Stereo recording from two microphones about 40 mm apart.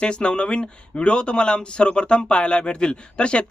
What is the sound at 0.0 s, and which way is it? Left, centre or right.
Speech, left.